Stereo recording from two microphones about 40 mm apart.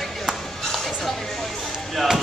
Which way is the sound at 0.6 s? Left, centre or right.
Centre.